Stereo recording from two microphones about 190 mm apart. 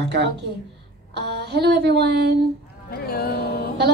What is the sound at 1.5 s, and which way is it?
Speech, 60° right (ahead or behind).